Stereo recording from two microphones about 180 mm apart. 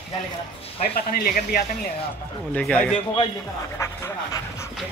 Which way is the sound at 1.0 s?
55° left (ahead or behind).